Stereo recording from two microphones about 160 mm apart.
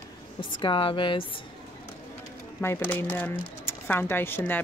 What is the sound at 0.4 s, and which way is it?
Speech, 30° left (ahead or behind).